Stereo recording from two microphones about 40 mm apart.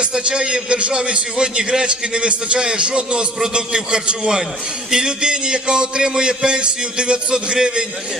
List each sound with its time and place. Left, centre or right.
0.0 s a man's voice: right